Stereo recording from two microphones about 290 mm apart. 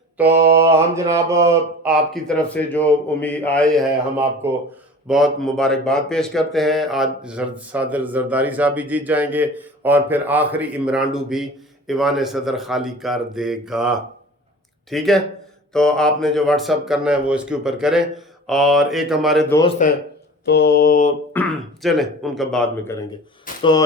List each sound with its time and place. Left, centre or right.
0.2 s speech: centre
0.6 s mantra: centre
2.1 s speech: centre
20.4 s mantra: left
21.3 s speech: centre
23.5 s a sound: left